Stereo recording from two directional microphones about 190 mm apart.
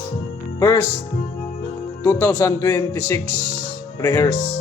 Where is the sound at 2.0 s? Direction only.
15° left (ahead or behind).